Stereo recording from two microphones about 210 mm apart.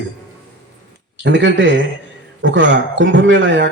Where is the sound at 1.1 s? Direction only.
60° right (ahead or behind).